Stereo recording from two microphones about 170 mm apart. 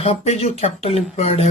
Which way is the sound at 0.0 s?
35° left (ahead or behind).